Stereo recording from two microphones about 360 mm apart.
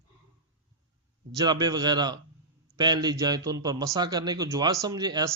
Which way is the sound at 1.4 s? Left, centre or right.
Centre.